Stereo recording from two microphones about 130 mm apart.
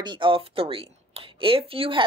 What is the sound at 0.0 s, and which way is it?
Speech, 40° right (ahead or behind).